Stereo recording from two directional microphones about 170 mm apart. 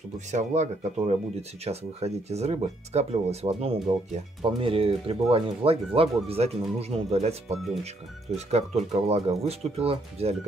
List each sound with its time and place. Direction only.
0.3 s speech: 45° right (ahead or behind)